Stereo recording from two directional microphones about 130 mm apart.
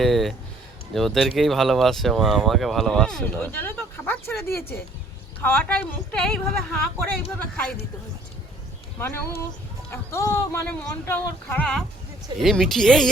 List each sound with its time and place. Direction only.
0.0 s speech: centre (ahead or behind)
3.4 s speech: 15° left (ahead or behind)
9.0 s speech: 15° left (ahead or behind)